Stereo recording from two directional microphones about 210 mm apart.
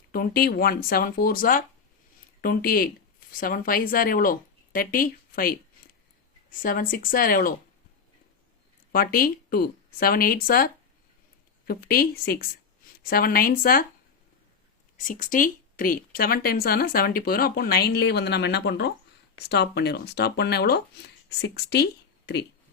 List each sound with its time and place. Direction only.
0.1 s a woman's voice: 45° left (ahead or behind)
8.9 s a woman's voice: 45° left (ahead or behind)
14.9 s a woman's voice: 40° left (ahead or behind)